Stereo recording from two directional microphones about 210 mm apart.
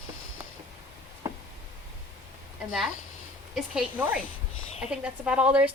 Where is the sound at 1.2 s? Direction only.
15° right (ahead or behind).